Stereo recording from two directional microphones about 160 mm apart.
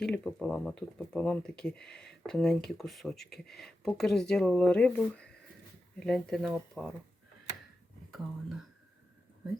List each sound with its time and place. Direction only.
0.0 s speech: 5° left (ahead or behind)